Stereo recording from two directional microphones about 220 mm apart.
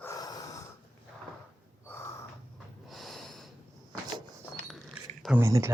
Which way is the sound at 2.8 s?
Centre (ahead or behind).